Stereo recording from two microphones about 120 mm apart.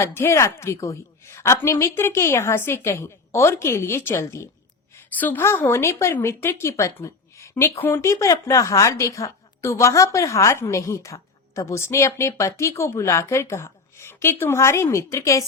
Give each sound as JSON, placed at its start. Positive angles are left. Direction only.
{"t": 0.0, "sound": "a woman's voice", "side_deg": 25}